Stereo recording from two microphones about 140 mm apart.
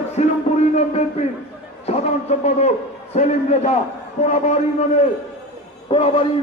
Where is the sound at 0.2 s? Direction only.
50° left (ahead or behind).